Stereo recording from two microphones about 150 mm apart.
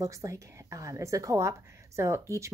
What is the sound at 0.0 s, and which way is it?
Speech, 20° right (ahead or behind).